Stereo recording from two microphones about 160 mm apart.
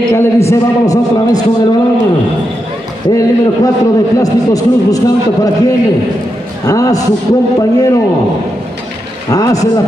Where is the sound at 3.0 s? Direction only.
20° left (ahead or behind).